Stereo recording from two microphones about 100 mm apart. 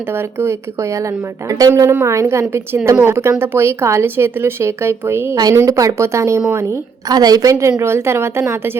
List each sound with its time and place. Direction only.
0.1 s a woman's voice: 25° right (ahead or behind)
5.4 s a woman's voice: 35° right (ahead or behind)
7.1 s a woman's voice: 40° right (ahead or behind)
7.8 s a woman's voice: 25° right (ahead or behind)